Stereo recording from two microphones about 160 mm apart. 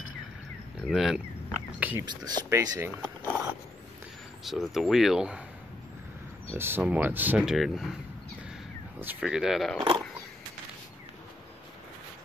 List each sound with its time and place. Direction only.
0.8 s speech: 5° right (ahead or behind)
2.0 s speech: 25° right (ahead or behind)
4.5 s speech: centre (ahead or behind)
6.5 s speech: 15° right (ahead or behind)
9.0 s speech: 10° right (ahead or behind)